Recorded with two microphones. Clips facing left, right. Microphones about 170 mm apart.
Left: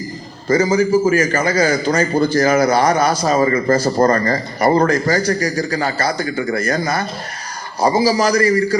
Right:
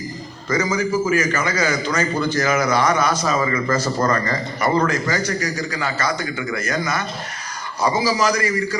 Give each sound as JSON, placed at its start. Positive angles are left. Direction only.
{"t": 0.4, "sound": "a man's voice", "side_deg": 30}